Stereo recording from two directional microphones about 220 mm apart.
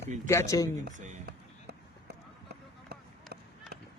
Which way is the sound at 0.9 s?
35° right (ahead or behind).